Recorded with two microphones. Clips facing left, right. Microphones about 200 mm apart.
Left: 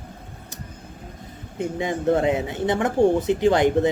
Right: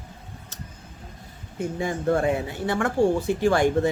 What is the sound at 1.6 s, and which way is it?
A man's voice, 20° left (ahead or behind).